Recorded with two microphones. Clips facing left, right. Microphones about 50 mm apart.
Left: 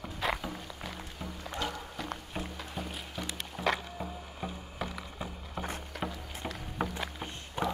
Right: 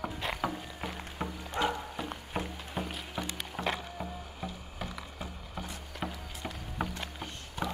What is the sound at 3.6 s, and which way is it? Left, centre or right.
Music, centre.